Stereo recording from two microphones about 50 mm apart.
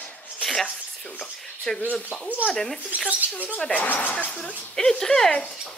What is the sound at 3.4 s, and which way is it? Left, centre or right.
Speech, left.